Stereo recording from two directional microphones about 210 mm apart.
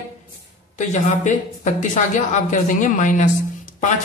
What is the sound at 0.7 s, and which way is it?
Speech, 35° left (ahead or behind).